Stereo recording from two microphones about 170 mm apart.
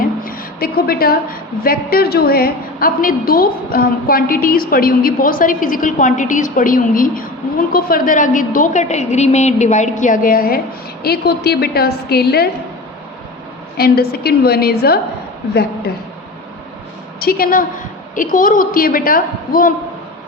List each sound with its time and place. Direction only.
0.0 s a woman's voice: 60° left (ahead or behind)
11.0 s a woman's voice: 70° left (ahead or behind)
13.7 s a woman's voice: 65° left (ahead or behind)
17.2 s a woman's voice: 60° left (ahead or behind)